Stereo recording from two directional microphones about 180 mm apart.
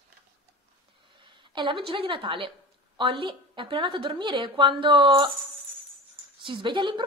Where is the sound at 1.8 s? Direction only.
30° right (ahead or behind).